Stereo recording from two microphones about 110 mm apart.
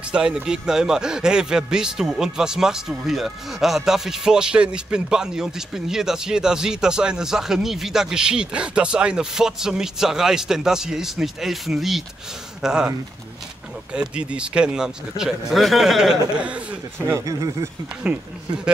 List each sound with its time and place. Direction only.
0.1 s speech: 5° right (ahead or behind)
13.9 s speech: 10° right (ahead or behind)
17.1 s speech: 30° right (ahead or behind)